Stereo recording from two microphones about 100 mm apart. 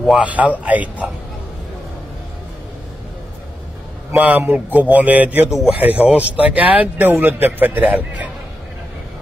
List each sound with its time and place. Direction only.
0.2 s speech: 15° right (ahead or behind)
4.1 s speech: 15° right (ahead or behind)